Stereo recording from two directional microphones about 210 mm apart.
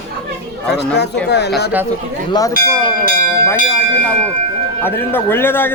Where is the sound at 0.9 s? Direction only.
55° left (ahead or behind).